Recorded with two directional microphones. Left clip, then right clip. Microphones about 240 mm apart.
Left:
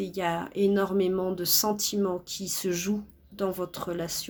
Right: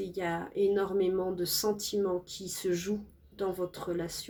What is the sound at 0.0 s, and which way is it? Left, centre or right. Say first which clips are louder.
Speech: left 5 dB; left.